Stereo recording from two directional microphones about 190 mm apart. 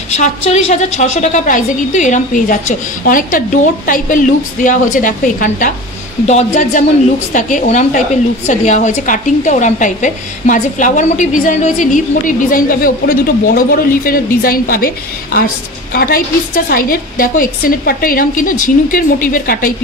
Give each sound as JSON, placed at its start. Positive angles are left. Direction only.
{"t": 0.1, "sound": "a woman's voice", "side_deg": 40}